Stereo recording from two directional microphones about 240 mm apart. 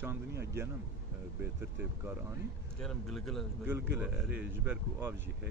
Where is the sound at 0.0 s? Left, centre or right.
Centre.